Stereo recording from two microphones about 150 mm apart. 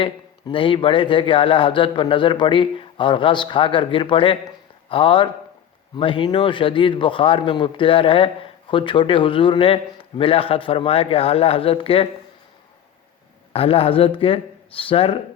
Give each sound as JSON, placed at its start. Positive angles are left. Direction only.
{"t": 0.0, "sound": "speech", "side_deg": 35}
{"t": 13.5, "sound": "speech", "side_deg": 40}